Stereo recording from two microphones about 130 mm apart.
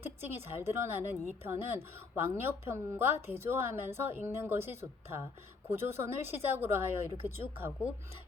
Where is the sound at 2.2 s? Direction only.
20° right (ahead or behind).